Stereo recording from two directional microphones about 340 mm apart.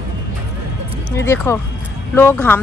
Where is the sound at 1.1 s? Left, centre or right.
Centre.